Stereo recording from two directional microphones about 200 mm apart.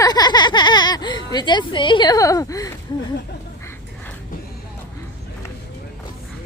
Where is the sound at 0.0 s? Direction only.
20° left (ahead or behind).